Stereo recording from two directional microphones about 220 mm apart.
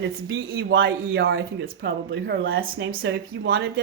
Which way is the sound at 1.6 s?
45° right (ahead or behind).